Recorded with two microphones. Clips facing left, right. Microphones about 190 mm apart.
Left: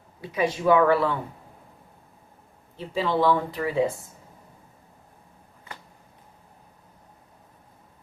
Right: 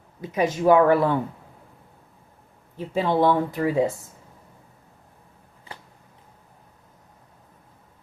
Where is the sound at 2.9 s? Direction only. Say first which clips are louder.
Right 2 dB; 50° right (ahead or behind).